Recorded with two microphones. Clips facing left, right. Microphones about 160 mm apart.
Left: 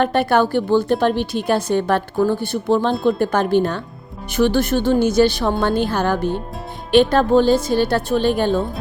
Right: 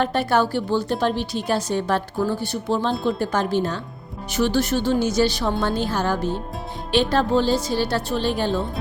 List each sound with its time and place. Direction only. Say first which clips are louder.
0.0 s a woman's voice: left 4 dB; 60° left (ahead or behind)